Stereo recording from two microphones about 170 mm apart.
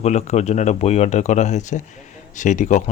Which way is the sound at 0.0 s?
40° left (ahead or behind).